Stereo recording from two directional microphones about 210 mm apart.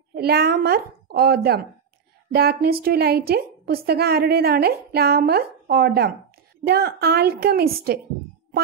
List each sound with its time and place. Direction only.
0.1 s a woman's voice: 50° right (ahead or behind)